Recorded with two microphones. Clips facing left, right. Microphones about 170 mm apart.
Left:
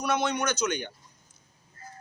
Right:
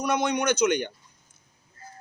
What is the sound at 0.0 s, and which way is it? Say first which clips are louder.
Speech: right 2 dB; 15° right (ahead or behind).